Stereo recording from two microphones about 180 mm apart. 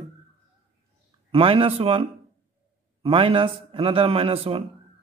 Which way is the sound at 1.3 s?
30° right (ahead or behind).